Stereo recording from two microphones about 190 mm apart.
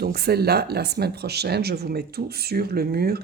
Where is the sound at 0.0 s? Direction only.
55° right (ahead or behind).